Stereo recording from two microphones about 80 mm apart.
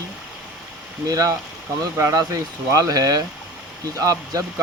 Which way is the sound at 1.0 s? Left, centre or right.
Right.